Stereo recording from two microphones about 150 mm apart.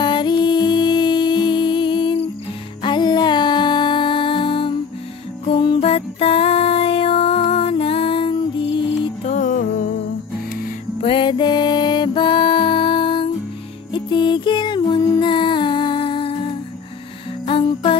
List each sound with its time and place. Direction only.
0.0 s music: 30° left (ahead or behind)
9.3 s music: 60° left (ahead or behind)
11.0 s music: 35° left (ahead or behind)
17.5 s music: 35° left (ahead or behind)